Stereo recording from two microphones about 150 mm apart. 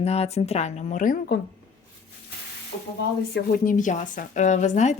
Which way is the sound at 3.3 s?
75° left (ahead or behind).